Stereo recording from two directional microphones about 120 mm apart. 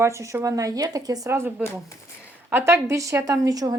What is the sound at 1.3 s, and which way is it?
Speech, 20° right (ahead or behind).